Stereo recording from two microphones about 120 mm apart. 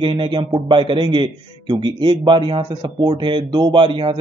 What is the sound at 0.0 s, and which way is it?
A man's voice, 40° right (ahead or behind).